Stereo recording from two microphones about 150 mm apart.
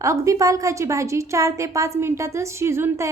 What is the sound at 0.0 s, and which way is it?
A woman's voice, 20° right (ahead or behind).